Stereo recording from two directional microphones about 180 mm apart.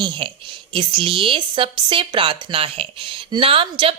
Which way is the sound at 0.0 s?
25° right (ahead or behind).